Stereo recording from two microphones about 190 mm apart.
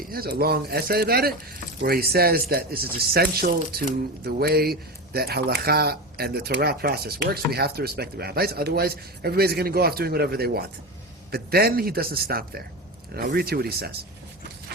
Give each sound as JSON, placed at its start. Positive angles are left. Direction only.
{"t": 0.1, "sound": "speech", "side_deg": -55}